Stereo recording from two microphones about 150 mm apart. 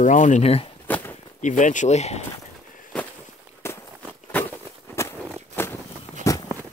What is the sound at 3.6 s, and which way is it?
Walk, 15° left (ahead or behind).